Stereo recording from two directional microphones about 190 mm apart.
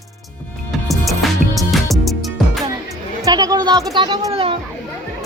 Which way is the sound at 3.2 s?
20° right (ahead or behind).